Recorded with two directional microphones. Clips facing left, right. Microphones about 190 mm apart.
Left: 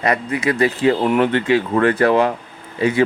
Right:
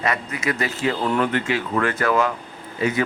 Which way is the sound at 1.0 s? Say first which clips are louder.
Left 5 dB; 20° left (ahead or behind).